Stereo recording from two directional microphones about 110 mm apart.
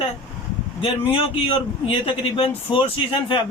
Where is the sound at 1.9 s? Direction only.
55° left (ahead or behind).